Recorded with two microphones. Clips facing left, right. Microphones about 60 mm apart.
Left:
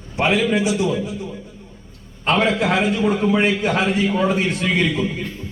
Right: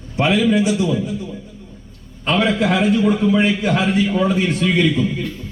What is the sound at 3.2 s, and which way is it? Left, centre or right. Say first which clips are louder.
A man's voice: right 1 dB; left.